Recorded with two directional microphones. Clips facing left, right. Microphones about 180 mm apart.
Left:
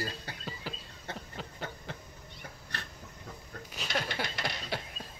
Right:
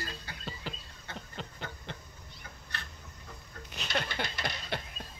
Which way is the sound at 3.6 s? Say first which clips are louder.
Even; 5° left (ahead or behind).